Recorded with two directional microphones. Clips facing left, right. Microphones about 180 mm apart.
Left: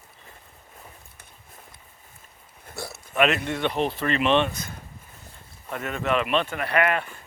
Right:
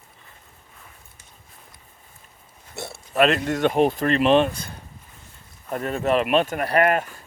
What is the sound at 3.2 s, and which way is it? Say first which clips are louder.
Speech: right 4 dB; 40° right (ahead or behind).